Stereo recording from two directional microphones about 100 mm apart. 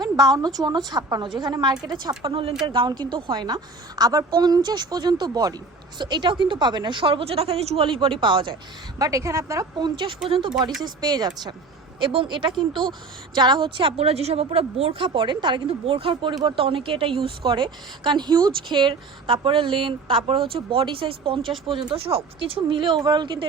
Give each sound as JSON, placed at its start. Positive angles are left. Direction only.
{"t": 0.0, "sound": "a woman's voice", "side_deg": -40}
{"t": 3.3, "sound": "a woman's voice", "side_deg": -45}
{"t": 9.0, "sound": "a woman's voice", "side_deg": -35}
{"t": 9.7, "sound": "a woman's voice", "side_deg": -50}
{"t": 10.2, "sound": "a woman's voice", "side_deg": -65}
{"t": 10.8, "sound": "a woman's voice", "side_deg": -45}
{"t": 11.9, "sound": "a woman's voice", "side_deg": -55}
{"t": 15.0, "sound": "a woman's voice", "side_deg": -55}
{"t": 16.3, "sound": "a woman's voice", "side_deg": -45}
{"t": 16.6, "sound": "a woman's voice", "side_deg": -65}